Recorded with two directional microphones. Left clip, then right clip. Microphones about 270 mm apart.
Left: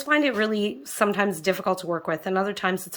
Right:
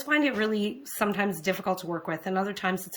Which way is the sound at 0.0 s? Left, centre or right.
Centre.